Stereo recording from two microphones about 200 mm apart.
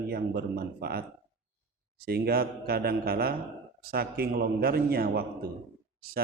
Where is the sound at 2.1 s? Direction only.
50° right (ahead or behind).